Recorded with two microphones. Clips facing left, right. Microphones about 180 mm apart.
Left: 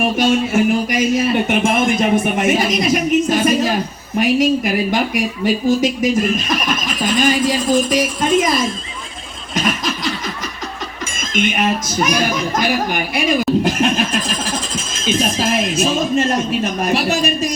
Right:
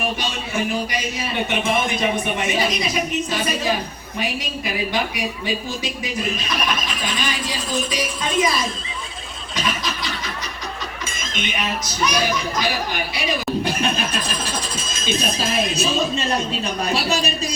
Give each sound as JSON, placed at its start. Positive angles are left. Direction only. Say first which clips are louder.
{"t": 0.2, "sound": "speech", "louder": "left 11 dB", "side_deg": 45}
{"t": 9.6, "sound": "chuckle", "louder": "left 6 dB", "side_deg": 50}
{"t": 11.0, "sound": "speech", "louder": "left 11 dB", "side_deg": 50}
{"t": 15.5, "sound": "speech", "louder": "left 2 dB", "side_deg": 50}